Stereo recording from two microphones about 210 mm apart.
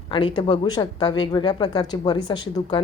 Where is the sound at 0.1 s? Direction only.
25° left (ahead or behind).